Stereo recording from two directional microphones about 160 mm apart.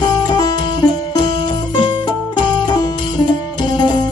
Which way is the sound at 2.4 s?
30° left (ahead or behind).